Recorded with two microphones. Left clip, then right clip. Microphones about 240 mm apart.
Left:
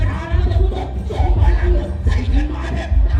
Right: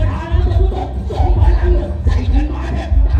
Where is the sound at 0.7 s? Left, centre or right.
Left.